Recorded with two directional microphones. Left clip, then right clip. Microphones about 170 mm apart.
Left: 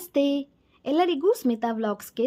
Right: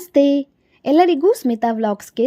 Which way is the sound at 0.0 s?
25° right (ahead or behind).